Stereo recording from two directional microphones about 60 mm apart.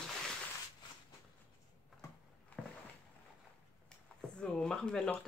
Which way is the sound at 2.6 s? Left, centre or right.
Centre.